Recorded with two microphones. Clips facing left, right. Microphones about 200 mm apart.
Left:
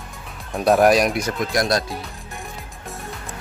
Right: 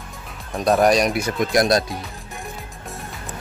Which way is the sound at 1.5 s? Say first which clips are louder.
Right 4 dB; 25° right (ahead or behind).